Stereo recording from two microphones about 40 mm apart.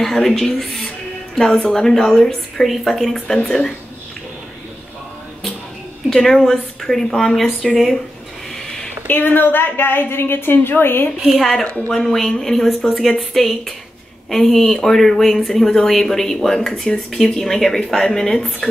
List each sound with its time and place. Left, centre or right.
0.0 s a woman's voice: centre
6.2 s speech: centre
9.0 s a woman's voice: left
11.3 s speech: centre
11.6 s a woman's voice: left
11.9 s speech: centre